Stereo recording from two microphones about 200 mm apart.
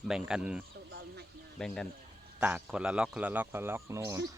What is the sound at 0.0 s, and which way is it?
Speech, 5° right (ahead or behind).